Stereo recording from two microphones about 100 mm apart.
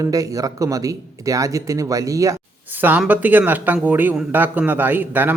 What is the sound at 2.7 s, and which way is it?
Speech, 20° right (ahead or behind).